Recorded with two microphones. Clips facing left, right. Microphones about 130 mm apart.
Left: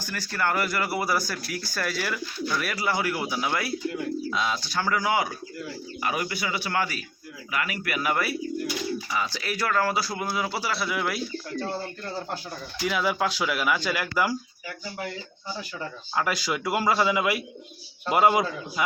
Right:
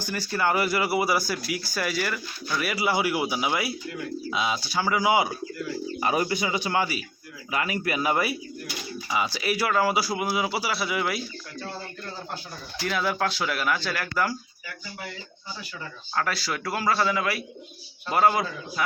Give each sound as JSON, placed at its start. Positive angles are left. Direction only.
{"t": 0.0, "sound": "speech", "side_deg": -15}
{"t": 6.0, "sound": "a man's voice", "side_deg": -30}
{"t": 7.5, "sound": "a man's voice", "side_deg": -30}
{"t": 12.8, "sound": "speech", "side_deg": 5}
{"t": 16.1, "sound": "speech", "side_deg": 15}